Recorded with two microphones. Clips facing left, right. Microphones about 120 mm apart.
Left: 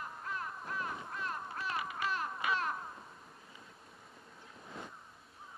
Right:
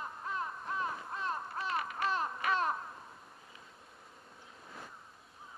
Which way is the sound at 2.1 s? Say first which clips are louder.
Right 3 dB; 30° right (ahead or behind).